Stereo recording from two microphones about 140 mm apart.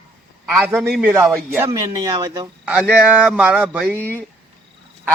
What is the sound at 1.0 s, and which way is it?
Speech, 15° right (ahead or behind).